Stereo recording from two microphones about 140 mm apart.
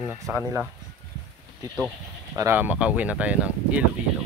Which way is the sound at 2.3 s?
15° right (ahead or behind).